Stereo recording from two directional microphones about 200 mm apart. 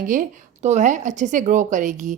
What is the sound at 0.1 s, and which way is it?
A woman's voice, 40° right (ahead or behind).